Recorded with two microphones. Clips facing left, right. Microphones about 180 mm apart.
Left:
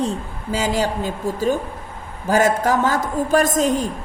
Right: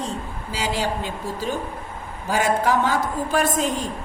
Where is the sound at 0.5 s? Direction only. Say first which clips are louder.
Left 4 dB; 45° left (ahead or behind).